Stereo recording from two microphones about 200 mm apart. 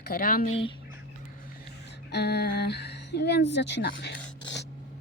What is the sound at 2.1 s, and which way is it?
Speech, 55° left (ahead or behind).